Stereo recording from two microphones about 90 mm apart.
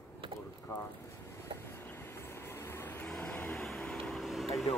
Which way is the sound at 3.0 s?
10° left (ahead or behind).